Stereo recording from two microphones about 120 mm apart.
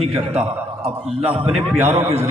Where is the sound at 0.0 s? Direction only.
60° right (ahead or behind).